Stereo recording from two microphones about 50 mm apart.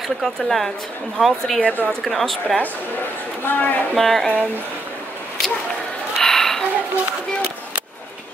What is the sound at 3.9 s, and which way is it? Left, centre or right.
Music, centre.